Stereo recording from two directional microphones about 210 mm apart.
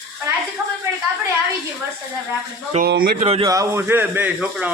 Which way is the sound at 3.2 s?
30° right (ahead or behind).